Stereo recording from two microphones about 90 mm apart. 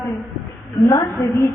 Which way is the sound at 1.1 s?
30° left (ahead or behind).